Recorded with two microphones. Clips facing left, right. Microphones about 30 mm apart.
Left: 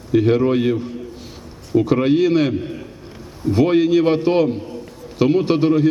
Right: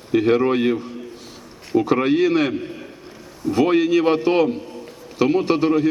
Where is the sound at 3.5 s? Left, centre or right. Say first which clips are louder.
Left 2 dB; centre.